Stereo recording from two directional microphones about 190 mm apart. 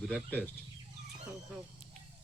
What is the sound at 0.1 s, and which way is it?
Speech, 10° left (ahead or behind).